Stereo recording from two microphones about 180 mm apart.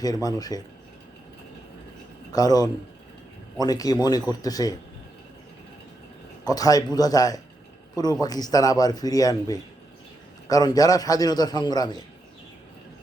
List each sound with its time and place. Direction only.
0.0 s a man's voice: 20° left (ahead or behind)
2.3 s a man's voice: 20° left (ahead or behind)
6.4 s a man's voice: 20° left (ahead or behind)